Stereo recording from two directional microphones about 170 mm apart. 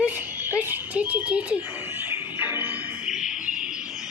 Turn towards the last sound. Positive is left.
turn(degrees=-5)  # may be behind; listen again after turning